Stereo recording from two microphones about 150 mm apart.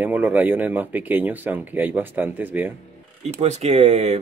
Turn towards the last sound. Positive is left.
turn(degrees=-45)  # may be behind; listen again after turning